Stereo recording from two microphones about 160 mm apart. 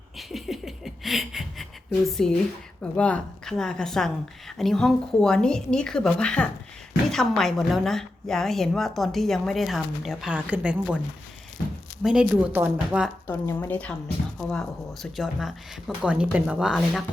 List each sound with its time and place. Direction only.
0.2 s a woman's voice: centre (ahead or behind)
12.0 s speech: 10° right (ahead or behind)
13.2 s a woman's voice: 15° left (ahead or behind); by 17.0 s centre (ahead or behind)